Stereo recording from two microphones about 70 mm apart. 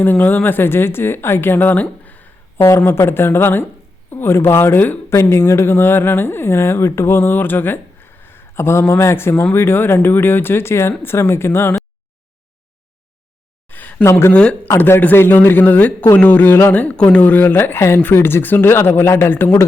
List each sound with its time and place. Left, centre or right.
0.0 s speech: left
2.8 s a woman's voice: left
5.0 s a woman's voice: left
7.2 s a man's voice: left
13.7 s a sound: left
14.0 s a woman's voice: left
14.3 s speech: centre
14.8 s a man's voice: left